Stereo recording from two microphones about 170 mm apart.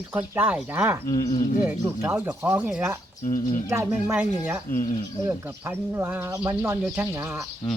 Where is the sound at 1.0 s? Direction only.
20° left (ahead or behind).